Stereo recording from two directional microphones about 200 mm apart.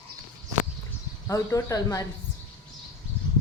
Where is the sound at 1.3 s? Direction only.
15° left (ahead or behind).